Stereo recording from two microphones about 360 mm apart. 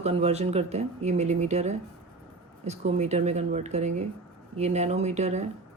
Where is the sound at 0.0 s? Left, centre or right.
Centre.